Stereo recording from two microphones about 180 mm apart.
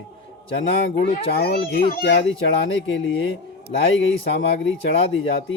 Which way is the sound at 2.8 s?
90° left.